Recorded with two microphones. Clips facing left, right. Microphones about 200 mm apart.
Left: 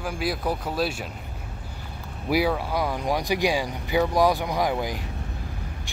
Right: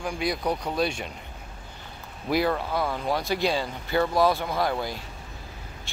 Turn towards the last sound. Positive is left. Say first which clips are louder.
# left 2 dB
turn(degrees=15)  # may be behind; listen again after turning